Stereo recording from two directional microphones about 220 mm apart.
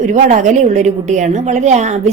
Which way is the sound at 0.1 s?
35° right (ahead or behind).